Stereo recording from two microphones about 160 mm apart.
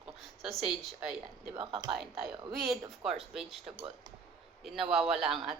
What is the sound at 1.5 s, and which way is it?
Speech, 30° right (ahead or behind).